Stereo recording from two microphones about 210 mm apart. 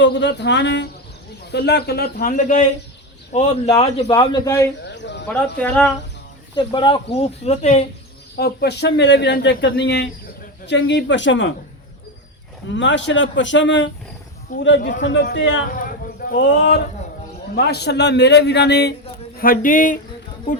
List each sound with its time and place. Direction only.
0.0 s a man's voice: 55° left (ahead or behind); by 4.7 s 15° left (ahead or behind)
4.8 s a sound: 55° left (ahead or behind)
5.3 s speech: 5° left (ahead or behind)
6.6 s a man's voice: 25° left (ahead or behind)
8.4 s speech: 50° left (ahead or behind)
12.6 s speech: 60° left (ahead or behind)
15.7 s clip-clop: 40° left (ahead or behind)
17.5 s a man's voice: 50° left (ahead or behind)
19.4 s speech: 40° left (ahead or behind)